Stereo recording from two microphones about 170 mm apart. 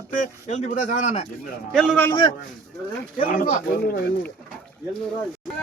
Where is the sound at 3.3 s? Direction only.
60° left (ahead or behind).